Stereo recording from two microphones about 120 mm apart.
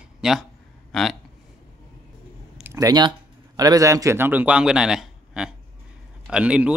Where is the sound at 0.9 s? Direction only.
5° left (ahead or behind).